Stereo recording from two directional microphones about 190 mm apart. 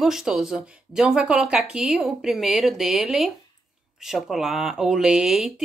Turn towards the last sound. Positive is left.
turn(degrees=0)  # may be behind; listen again after turning